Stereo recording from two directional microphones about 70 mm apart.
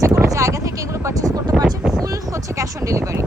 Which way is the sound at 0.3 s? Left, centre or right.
Right.